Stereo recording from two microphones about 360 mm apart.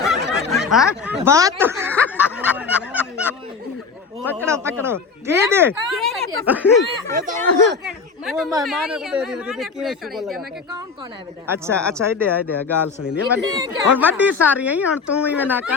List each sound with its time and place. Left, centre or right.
0.0 s speech: centre
1.9 s snicker: centre
4.3 s speech: centre
7.1 s speech: right
7.9 s a woman's voice: centre
11.4 s speech: centre
12.5 s a woman's voice: centre